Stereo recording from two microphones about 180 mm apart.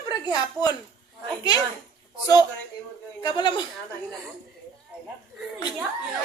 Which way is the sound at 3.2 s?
25° left (ahead or behind).